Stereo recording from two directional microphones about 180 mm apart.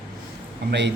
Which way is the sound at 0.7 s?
75° right (ahead or behind).